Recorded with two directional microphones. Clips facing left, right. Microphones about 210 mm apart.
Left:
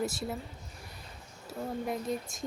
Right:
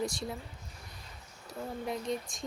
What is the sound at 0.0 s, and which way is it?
Speech, 5° left (ahead or behind).